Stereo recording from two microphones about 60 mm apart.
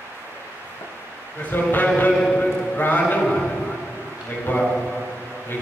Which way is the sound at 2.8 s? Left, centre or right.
Left.